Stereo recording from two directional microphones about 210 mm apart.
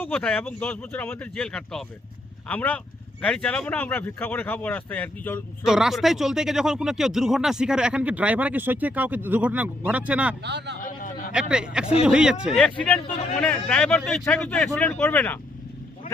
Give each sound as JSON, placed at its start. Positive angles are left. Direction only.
{"t": 0.0, "sound": "speech", "side_deg": 5}
{"t": 5.6, "sound": "speech", "side_deg": -5}
{"t": 10.4, "sound": "a man's voice", "side_deg": -55}
{"t": 10.8, "sound": "a sound", "side_deg": 40}
{"t": 11.3, "sound": "speech", "side_deg": -5}